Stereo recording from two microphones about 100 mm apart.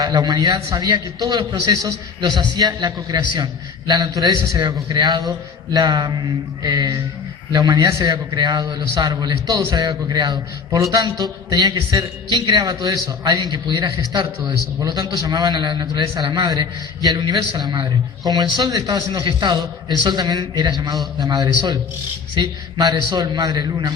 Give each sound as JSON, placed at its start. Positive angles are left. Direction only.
{"t": 0.0, "sound": "a man's voice", "side_deg": -40}